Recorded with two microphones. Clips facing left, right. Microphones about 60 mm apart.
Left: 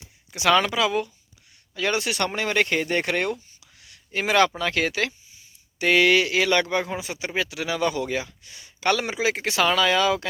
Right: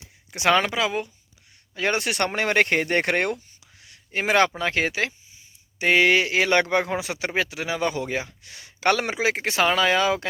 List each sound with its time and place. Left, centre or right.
0.3 s speech: right
1.7 s speech: right
3.8 s speech: right
6.9 s speech: right
7.3 s speech: right
8.4 s speech: right